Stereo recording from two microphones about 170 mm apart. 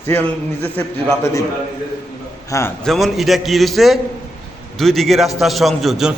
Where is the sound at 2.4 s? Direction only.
20° left (ahead or behind).